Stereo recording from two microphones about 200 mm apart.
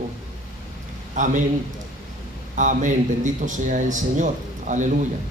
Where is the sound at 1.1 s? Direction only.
40° right (ahead or behind).